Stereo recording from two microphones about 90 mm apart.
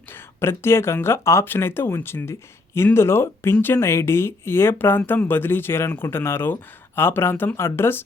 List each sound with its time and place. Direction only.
0.1 s speech: 25° left (ahead or behind)